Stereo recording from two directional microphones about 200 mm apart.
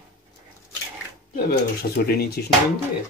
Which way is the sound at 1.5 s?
50° left (ahead or behind).